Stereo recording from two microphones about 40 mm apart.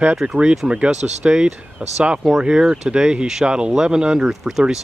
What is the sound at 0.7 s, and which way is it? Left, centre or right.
Speech, right.